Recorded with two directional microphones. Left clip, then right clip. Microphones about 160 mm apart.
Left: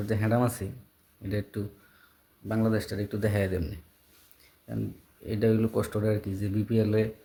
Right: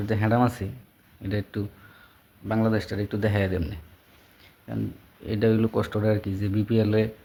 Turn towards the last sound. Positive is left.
turn(degrees=15)  # may be behind; listen again after turning